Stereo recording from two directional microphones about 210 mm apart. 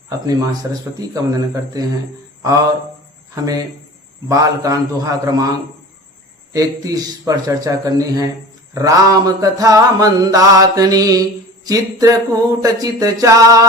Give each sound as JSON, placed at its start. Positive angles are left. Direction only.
{"t": 0.3, "sound": "mantra", "side_deg": -20}
{"t": 4.3, "sound": "mantra", "side_deg": -15}
{"t": 6.5, "sound": "mantra", "side_deg": -15}